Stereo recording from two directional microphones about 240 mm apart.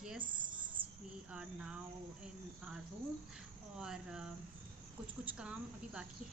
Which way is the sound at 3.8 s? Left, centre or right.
Centre.